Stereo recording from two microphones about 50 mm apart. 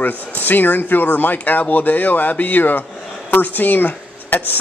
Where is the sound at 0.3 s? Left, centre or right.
Left.